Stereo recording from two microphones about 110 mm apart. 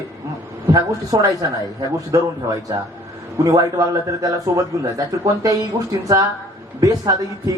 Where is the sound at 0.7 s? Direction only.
30° right (ahead or behind).